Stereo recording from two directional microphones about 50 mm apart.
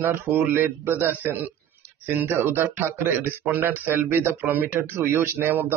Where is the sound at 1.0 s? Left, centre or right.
Right.